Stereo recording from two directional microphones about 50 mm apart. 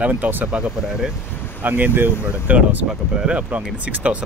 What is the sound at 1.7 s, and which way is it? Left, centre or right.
Speech, right.